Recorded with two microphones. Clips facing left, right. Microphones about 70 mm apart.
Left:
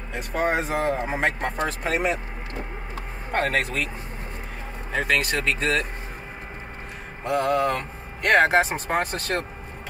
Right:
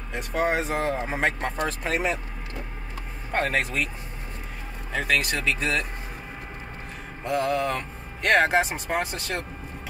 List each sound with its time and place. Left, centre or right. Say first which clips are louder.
0.1 s speech: left 1 dB; centre
3.3 s speech: left 1 dB; centre
5.0 s speech: left 1 dB; left
7.2 s speech: left 3 dB; centre
9.0 s speech: left 4 dB; left